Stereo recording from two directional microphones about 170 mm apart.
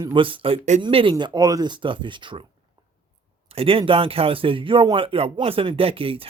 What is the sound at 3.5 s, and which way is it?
A man's voice, 35° right (ahead or behind).